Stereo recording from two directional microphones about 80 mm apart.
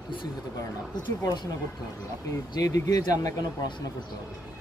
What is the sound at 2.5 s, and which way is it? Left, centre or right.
Speech, left.